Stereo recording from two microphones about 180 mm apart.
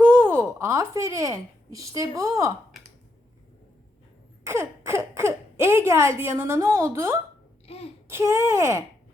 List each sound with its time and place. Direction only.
0.0 s a woman's voice: 10° right (ahead or behind)
4.4 s speech: 15° right (ahead or behind)
7.7 s child singing: 35° left (ahead or behind)
8.0 s speech: 15° right (ahead or behind)